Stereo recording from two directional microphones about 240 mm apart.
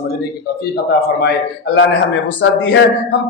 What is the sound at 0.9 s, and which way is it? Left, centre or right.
Speech, left.